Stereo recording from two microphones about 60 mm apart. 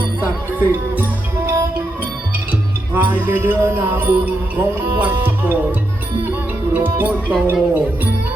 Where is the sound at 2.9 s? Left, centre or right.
Right.